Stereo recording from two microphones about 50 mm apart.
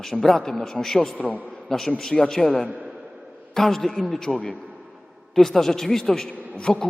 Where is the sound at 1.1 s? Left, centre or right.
Left.